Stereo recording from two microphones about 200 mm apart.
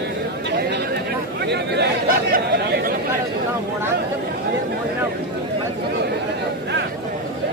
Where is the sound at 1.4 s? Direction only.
55° right (ahead or behind).